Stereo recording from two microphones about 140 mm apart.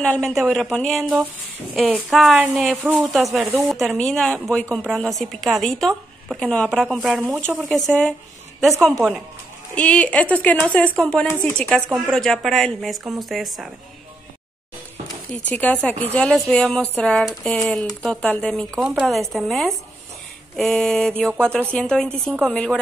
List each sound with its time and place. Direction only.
0.0 s speech: 5° left (ahead or behind)
2.3 s speech: 10° right (ahead or behind)
3.0 s speech: centre (ahead or behind)
15.4 s speech: 10° left (ahead or behind)